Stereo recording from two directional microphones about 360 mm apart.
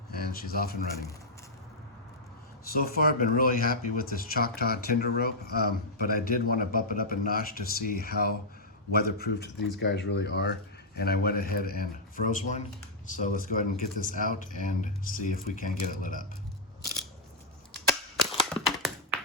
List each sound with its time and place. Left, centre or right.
0.1 s speech: left
2.7 s speech: left
17.8 s typewriter: centre